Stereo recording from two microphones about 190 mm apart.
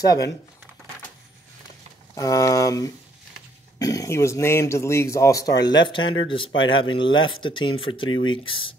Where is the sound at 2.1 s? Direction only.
15° left (ahead or behind).